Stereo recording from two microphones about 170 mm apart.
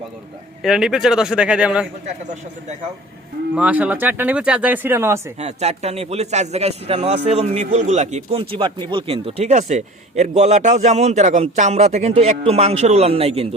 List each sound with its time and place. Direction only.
0.6 s speech: centre (ahead or behind)
3.5 s speech: 5° right (ahead or behind)
5.4 s a man's voice: 40° right (ahead or behind)